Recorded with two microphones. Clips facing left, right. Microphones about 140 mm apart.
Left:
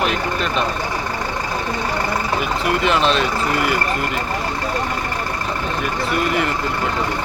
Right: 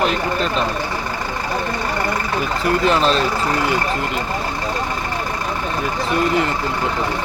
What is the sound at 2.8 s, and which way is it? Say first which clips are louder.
Speech: right 1 dB; 35° right (ahead or behind).